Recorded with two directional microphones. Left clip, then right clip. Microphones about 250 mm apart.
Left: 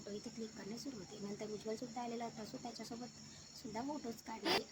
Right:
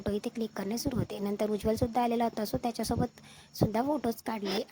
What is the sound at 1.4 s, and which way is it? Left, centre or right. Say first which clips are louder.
Speech: right 16 dB; right.